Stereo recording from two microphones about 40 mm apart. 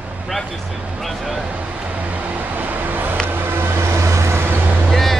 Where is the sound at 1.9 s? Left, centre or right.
Right.